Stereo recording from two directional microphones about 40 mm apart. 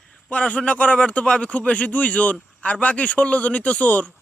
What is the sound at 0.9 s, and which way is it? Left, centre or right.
Speech, left.